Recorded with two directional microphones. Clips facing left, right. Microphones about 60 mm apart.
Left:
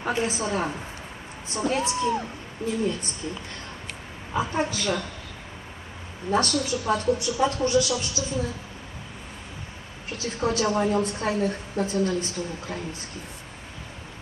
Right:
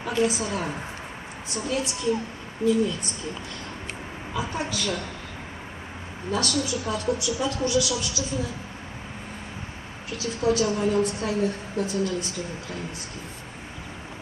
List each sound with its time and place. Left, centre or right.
0.1 s a woman's voice: left
4.4 s a woman's voice: left
6.3 s a woman's voice: left
10.0 s a woman's voice: left